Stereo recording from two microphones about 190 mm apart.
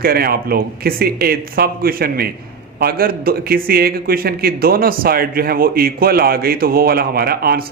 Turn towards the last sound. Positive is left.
turn(degrees=-55)  # may be behind; listen again after turning